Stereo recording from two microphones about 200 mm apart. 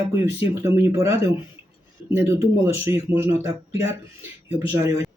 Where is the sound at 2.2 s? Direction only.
15° right (ahead or behind).